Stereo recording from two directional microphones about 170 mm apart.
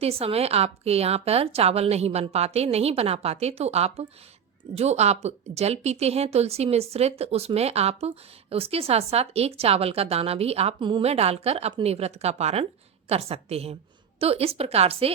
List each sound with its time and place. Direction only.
0.0 s a woman's voice: 35° right (ahead or behind)